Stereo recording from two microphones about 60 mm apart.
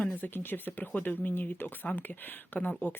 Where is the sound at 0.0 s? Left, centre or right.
Left.